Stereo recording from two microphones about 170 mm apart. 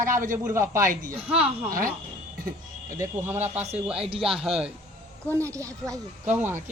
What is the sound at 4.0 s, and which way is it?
Speech, 35° right (ahead or behind).